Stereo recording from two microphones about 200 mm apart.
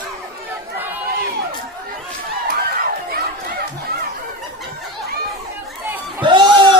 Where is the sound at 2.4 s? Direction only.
50° right (ahead or behind).